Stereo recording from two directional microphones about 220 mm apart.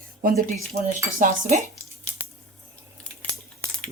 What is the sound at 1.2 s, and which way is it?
Dishes, 40° right (ahead or behind).